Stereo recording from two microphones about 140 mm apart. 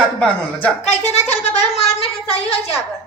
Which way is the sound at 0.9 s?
50° left (ahead or behind).